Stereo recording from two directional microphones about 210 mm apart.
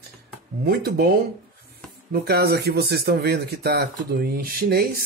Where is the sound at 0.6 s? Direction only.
45° right (ahead or behind).